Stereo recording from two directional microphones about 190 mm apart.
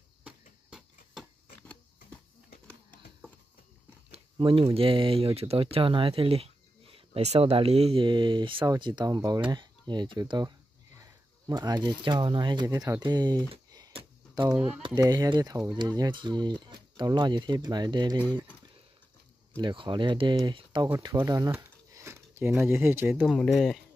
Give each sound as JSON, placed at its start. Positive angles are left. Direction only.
{"t": 0.2, "sound": "a sound", "side_deg": -5}
{"t": 4.1, "sound": "speech", "side_deg": -30}
{"t": 13.5, "sound": "typing", "side_deg": -20}
{"t": 14.5, "sound": "speech", "side_deg": -5}
{"t": 15.0, "sound": "speech", "side_deg": -20}
{"t": 19.6, "sound": "speech", "side_deg": -25}
{"t": 20.9, "sound": "a sound", "side_deg": -15}
{"t": 22.5, "sound": "speech", "side_deg": -10}
{"t": 23.2, "sound": "speech", "side_deg": 0}